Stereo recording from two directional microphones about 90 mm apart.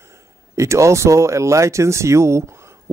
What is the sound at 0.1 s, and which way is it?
Speech, 35° right (ahead or behind).